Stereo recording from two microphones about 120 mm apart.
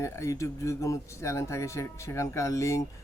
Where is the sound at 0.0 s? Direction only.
25° left (ahead or behind).